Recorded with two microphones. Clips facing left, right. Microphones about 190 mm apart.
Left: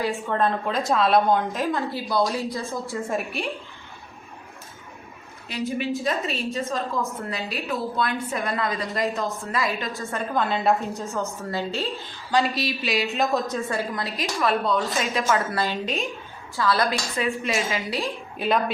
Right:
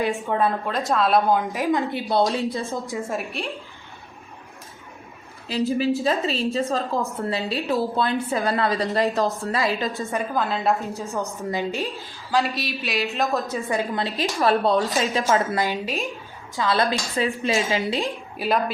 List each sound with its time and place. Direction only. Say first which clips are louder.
0.0 s a woman's voice: right 2 dB; 15° right (ahead or behind)
3.0 s a woman's voice: left 1 dB; centre (ahead or behind)
5.5 s a woman's voice: right 5 dB; 35° right (ahead or behind)
10.0 s a woman's voice: right 3 dB; 15° right (ahead or behind)
10.3 s a woman's voice: left 2 dB; centre (ahead or behind)
11.1 s a woman's voice: right 1 dB; 15° right (ahead or behind)
12.3 s a woman's voice: left 1 dB; centre (ahead or behind)
13.7 s a woman's voice: right 3 dB; 20° right (ahead or behind)
15.5 s a woman's voice: right 1 dB; 15° right (ahead or behind)
18.3 s a woman's voice: even; 5° right (ahead or behind)